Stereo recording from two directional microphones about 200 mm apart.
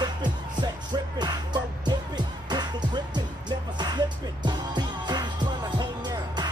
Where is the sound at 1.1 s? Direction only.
20° right (ahead or behind).